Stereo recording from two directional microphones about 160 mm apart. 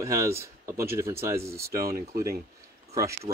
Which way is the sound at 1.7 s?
70° right (ahead or behind).